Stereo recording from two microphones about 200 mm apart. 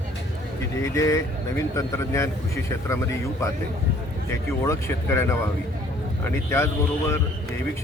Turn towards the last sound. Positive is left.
turn(degrees=15)  # may be behind; listen again after turning